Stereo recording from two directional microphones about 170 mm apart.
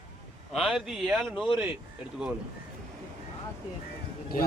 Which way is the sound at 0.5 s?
5° right (ahead or behind).